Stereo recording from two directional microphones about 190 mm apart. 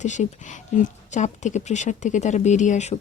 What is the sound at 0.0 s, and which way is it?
Speech, 40° left (ahead or behind).